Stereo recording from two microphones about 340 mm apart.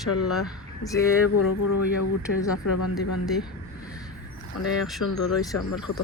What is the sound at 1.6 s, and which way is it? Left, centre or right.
Speech, left.